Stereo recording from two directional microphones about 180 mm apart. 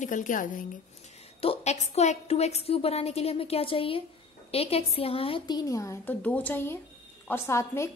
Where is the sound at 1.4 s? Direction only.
35° left (ahead or behind).